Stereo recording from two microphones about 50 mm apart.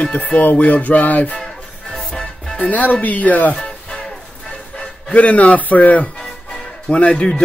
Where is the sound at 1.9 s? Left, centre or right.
Centre.